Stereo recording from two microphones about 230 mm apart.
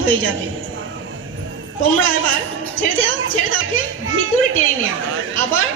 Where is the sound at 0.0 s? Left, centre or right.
Right.